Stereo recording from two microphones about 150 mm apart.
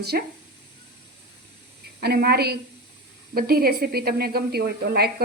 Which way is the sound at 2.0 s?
90° right.